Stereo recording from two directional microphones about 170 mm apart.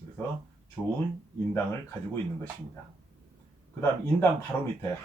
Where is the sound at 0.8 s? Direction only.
Centre (ahead or behind).